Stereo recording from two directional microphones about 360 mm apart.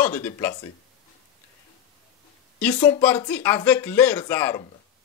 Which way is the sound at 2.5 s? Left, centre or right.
Centre.